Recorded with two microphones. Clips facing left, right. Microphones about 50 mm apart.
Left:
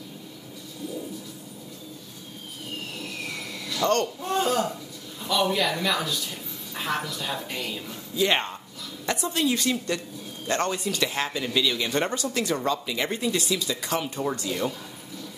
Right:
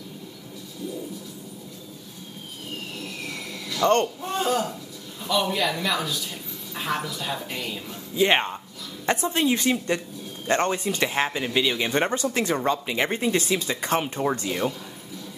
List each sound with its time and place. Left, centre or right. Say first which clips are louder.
3.0 s a sound: even; centre
3.8 s speech: right 3 dB; right
4.2 s a woman's voice: even; centre
8.2 s speech: right 3 dB; right